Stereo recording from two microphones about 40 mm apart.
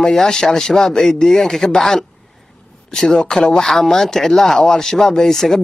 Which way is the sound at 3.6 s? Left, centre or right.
Centre.